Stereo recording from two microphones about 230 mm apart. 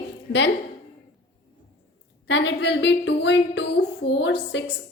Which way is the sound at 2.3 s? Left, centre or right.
Left.